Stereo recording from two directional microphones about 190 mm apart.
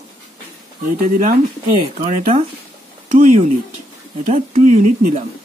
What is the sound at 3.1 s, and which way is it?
Speech, 45° right (ahead or behind).